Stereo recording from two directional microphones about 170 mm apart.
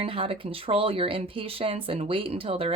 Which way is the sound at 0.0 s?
35° right (ahead or behind).